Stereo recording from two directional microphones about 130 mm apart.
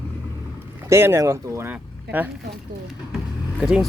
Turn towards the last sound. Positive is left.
turn(degrees=-5)  # may be behind; listen again after turning